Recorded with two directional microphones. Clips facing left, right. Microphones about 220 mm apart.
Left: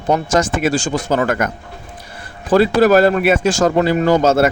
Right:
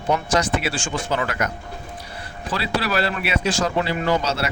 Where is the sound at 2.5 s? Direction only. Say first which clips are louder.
Left 13 dB; 45° left (ahead or behind).